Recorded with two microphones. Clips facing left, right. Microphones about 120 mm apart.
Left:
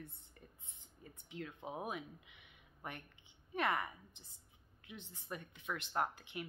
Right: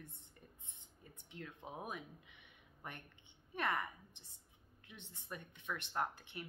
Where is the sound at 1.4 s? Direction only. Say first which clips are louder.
Left 3 dB; 10° left (ahead or behind).